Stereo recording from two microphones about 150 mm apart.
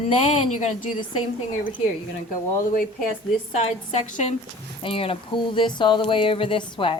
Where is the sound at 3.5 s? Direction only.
50° left (ahead or behind).